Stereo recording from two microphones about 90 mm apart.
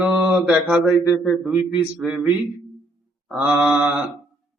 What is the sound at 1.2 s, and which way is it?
Speech, 5° right (ahead or behind).